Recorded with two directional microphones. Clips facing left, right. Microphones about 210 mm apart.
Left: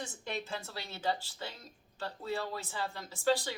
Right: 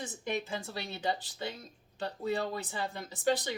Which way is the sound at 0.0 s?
15° right (ahead or behind).